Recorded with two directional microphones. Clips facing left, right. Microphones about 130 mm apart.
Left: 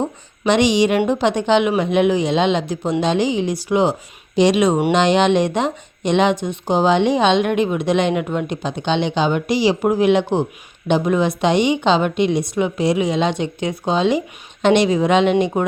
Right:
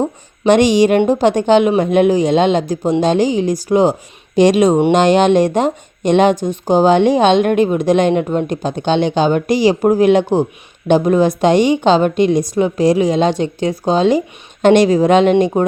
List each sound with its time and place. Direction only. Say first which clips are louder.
0.4 s a woman's voice: right 5 dB; 45° right (ahead or behind)